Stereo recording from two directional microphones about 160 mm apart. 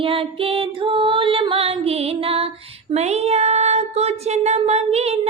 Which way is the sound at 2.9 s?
45° right (ahead or behind).